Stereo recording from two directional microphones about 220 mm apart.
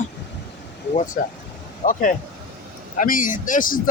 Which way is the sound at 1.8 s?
35° left (ahead or behind).